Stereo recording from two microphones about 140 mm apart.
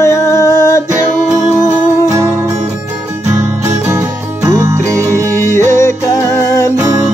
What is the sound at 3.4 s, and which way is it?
Music, 20° right (ahead or behind).